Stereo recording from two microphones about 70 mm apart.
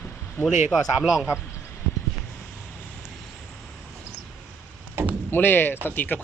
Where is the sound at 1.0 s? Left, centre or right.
Centre.